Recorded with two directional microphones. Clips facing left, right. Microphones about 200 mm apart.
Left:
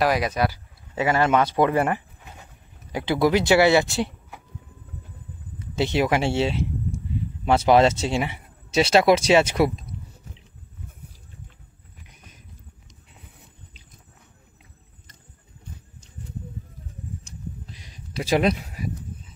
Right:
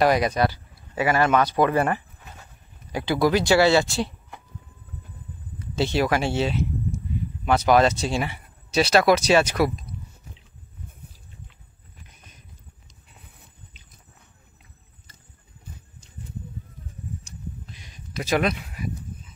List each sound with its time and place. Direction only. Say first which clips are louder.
0.0 s speech: right 2 dB; 5° left (ahead or behind)
0.9 s speech: even; 20° left (ahead or behind)
5.6 s speech: left 1 dB; 20° left (ahead or behind)
12.0 s horse: left 2 dB; 15° left (ahead or behind)
17.6 s a sound: left 1 dB; 35° left (ahead or behind)